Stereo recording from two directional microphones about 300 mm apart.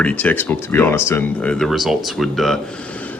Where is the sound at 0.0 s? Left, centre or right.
Centre.